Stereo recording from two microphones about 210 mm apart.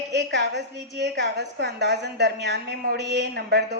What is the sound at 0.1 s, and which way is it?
A woman's voice, 55° right (ahead or behind).